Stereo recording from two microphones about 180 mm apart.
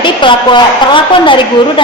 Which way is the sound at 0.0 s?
25° left (ahead or behind).